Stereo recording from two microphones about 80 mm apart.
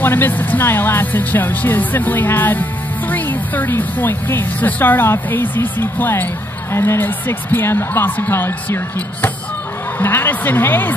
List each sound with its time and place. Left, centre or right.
0.0 s speech: left